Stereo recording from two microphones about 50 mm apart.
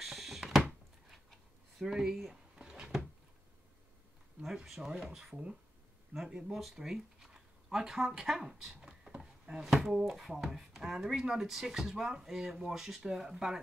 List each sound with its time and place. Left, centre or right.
0.0 s a sound: centre
1.9 s speech: centre
2.5 s drawer open or close: centre
4.6 s speech: centre
5.3 s speech: right
6.1 s speech: centre